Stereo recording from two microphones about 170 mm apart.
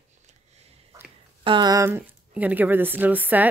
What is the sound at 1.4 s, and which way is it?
Speech, 30° right (ahead or behind).